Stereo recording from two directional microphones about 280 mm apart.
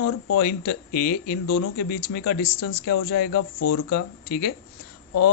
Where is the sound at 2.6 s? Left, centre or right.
Left.